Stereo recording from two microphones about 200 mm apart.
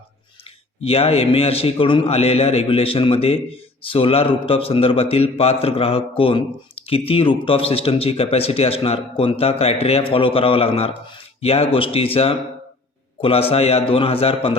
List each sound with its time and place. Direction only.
0.9 s a man's voice: 30° left (ahead or behind)